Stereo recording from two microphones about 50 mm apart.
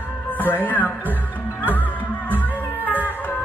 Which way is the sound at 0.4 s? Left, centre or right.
Left.